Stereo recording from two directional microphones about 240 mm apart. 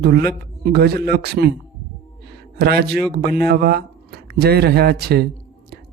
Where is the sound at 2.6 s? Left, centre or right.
Right.